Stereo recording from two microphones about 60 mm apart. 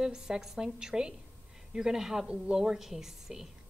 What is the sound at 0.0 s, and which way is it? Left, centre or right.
A woman's voice, centre.